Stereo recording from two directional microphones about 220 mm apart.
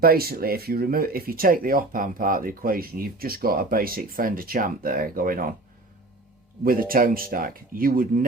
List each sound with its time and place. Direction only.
0.0 s speech: 45° right (ahead or behind)
6.7 s speech: 40° right (ahead or behind)